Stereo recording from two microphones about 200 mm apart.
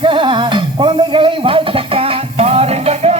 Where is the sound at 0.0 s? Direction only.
25° right (ahead or behind).